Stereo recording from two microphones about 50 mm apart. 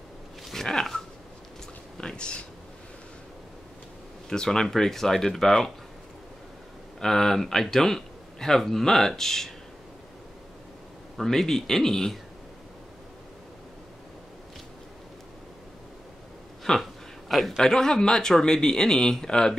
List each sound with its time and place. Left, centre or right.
0.5 s a sound: centre
4.3 s speech: centre
7.0 s speech: centre
11.1 s speech: centre
16.7 s a sound: centre
17.6 s speech: centre